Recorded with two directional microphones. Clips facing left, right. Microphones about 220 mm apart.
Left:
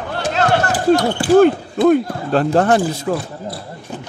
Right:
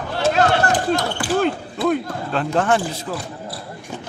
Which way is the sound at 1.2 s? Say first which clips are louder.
Left 8 dB; 25° left (ahead or behind).